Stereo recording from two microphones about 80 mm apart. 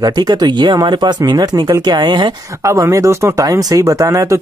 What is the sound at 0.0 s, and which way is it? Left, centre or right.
Speech, right.